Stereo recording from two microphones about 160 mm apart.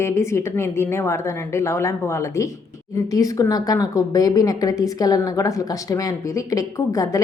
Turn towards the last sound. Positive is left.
turn(degrees=20)  # may be behind; listen again after turning